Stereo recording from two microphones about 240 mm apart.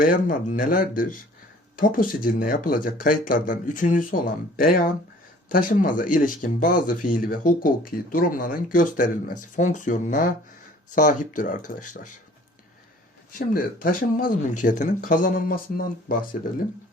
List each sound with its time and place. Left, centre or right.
0.0 s speech: left
13.5 s speech: left